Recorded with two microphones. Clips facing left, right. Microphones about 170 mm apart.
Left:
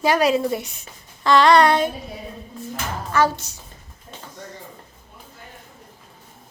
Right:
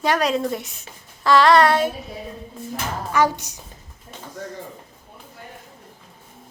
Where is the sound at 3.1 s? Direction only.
15° right (ahead or behind).